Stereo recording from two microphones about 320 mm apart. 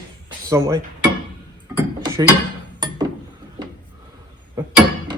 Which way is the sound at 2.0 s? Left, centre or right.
Centre.